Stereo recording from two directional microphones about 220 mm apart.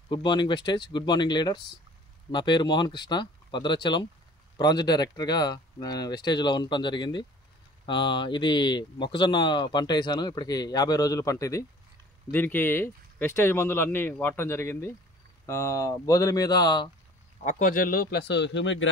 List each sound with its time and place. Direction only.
0.1 s speech: 20° left (ahead or behind)
17.4 s speech: 35° left (ahead or behind); by 18.9 s 55° left (ahead or behind)